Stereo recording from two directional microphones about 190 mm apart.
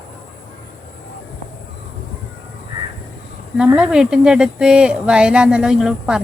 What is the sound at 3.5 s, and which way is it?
Speech, 5° right (ahead or behind).